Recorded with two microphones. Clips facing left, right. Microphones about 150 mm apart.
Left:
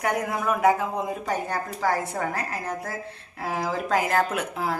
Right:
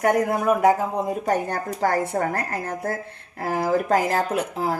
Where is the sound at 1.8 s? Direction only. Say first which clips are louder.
Right 4 dB; 50° right (ahead or behind).